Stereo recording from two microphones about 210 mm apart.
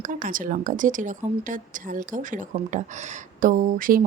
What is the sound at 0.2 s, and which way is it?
Speech, 40° right (ahead or behind).